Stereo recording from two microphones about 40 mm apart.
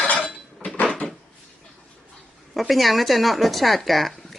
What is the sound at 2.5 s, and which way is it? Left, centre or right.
Speech, centre.